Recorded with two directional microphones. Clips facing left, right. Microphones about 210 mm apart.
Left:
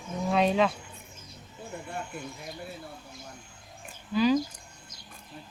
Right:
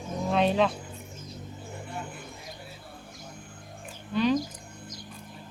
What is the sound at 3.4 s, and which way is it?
Music, 55° right (ahead or behind).